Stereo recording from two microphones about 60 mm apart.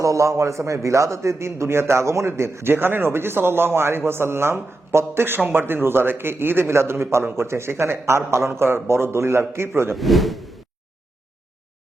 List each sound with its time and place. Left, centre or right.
0.0 s a man's voice: right
9.9 s speech: centre